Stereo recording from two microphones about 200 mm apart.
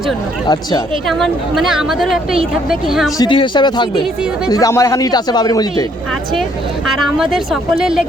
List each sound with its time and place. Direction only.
0.4 s a man's voice: 20° left (ahead or behind)
1.0 s speech: centre (ahead or behind)
3.2 s a man's voice: 25° left (ahead or behind)
6.8 s speech: centre (ahead or behind)